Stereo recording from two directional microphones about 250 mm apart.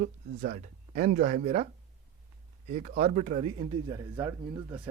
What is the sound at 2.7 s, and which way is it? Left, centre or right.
A woman's voice, right.